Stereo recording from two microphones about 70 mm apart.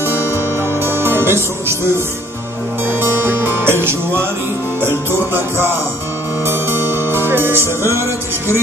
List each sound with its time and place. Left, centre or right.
0.0 s music: right
2.9 s music: right
7.1 s music: right